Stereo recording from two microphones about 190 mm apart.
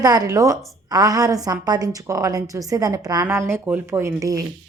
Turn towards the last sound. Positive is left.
turn(degrees=-15)  # may be behind; listen again after turning